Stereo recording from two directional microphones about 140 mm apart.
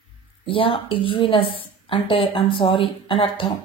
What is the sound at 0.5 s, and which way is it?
A woman's voice, 40° left (ahead or behind).